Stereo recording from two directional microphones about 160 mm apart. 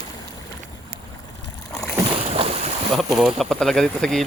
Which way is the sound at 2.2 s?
40° right (ahead or behind).